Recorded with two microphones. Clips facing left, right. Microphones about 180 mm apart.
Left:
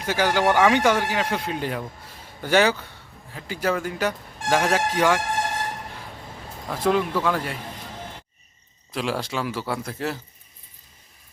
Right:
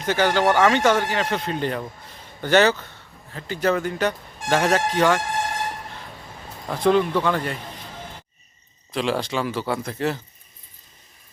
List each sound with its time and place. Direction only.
0.0 s speech: 10° left (ahead or behind)
6.7 s a man's voice: 5° left (ahead or behind)
8.9 s a man's voice: 5° left (ahead or behind)